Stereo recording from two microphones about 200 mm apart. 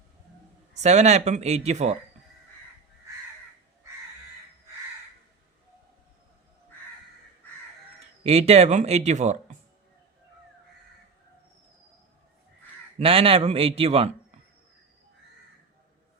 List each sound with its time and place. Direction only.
0.7 s speech: 35° right (ahead or behind)
8.2 s speech: 30° right (ahead or behind)
13.0 s a man's voice: 30° right (ahead or behind)